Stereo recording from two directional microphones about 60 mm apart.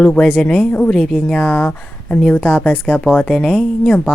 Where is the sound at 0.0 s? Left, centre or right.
Centre.